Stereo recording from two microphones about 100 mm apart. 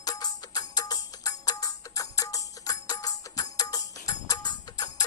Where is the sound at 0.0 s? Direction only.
40° left (ahead or behind).